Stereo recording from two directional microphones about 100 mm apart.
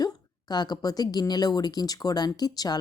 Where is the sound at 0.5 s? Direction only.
45° left (ahead or behind).